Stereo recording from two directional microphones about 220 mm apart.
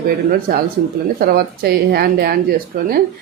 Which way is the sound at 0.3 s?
40° right (ahead or behind).